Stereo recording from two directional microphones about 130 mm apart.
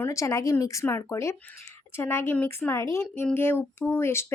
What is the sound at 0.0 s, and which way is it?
A woman's voice, 25° left (ahead or behind).